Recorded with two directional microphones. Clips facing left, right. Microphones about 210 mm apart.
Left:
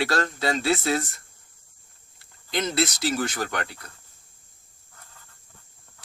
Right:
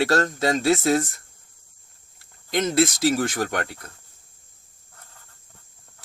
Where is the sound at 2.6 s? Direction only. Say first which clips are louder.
Right 5 dB; 50° right (ahead or behind).